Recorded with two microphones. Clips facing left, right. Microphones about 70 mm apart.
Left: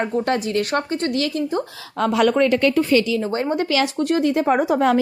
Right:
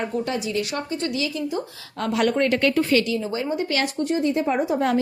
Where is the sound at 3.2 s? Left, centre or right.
Left.